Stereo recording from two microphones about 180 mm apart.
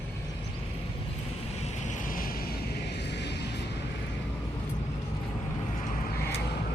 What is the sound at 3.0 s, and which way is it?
Music, 70° left (ahead or behind).